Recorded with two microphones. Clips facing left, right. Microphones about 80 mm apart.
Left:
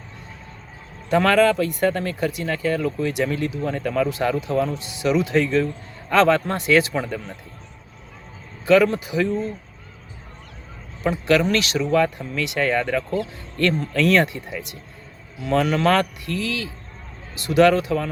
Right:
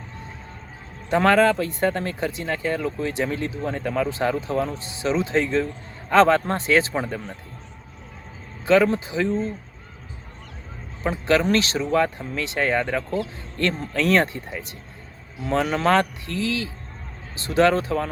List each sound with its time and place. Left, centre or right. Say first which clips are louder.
1.1 s speech: left 1 dB; right
8.6 s speech: left 2 dB; right
11.0 s speech: left 2 dB; right